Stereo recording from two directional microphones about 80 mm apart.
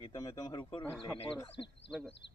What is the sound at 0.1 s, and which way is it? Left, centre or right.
Speech, left.